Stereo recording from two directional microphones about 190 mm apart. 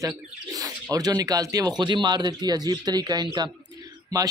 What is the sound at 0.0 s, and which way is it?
Speech, 20° right (ahead or behind).